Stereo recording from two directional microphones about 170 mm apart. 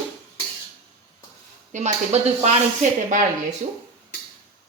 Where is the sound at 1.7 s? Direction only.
45° right (ahead or behind).